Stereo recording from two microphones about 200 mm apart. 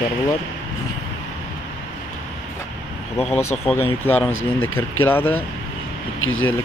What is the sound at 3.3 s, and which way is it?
Speech, 30° left (ahead or behind).